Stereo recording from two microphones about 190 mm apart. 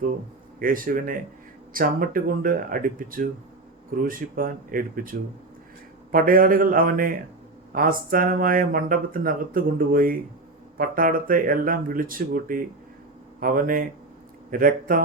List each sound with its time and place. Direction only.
0.6 s speech: 50° right (ahead or behind)